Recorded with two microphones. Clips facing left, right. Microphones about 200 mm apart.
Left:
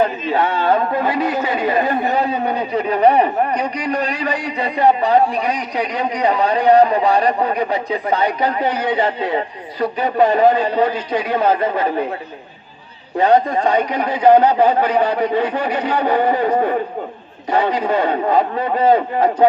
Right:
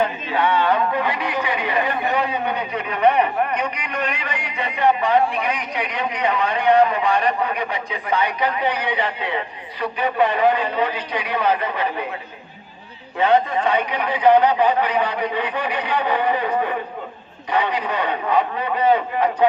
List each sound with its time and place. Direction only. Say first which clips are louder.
0.0 s a man's voice: left 4 dB; 40° left (ahead or behind)
13.1 s a man's voice: left 3 dB; 40° left (ahead or behind)